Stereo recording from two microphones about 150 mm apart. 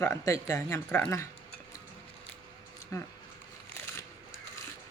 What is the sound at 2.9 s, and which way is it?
Speech, 20° left (ahead or behind).